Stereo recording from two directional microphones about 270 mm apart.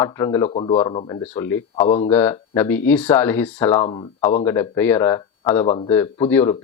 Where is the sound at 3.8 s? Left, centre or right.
Centre.